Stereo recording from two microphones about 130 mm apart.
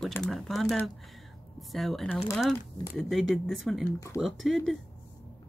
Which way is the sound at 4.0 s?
20° left (ahead or behind).